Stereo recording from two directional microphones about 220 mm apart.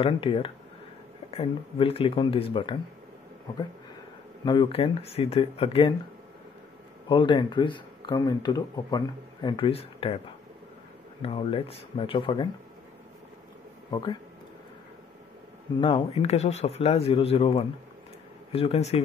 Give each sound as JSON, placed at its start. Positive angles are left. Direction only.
{"t": 0.0, "sound": "speech", "side_deg": 25}
{"t": 4.5, "sound": "speech", "side_deg": 20}
{"t": 7.1, "sound": "speech", "side_deg": 20}
{"t": 11.2, "sound": "speech", "side_deg": 25}
{"t": 15.8, "sound": "speech", "side_deg": 25}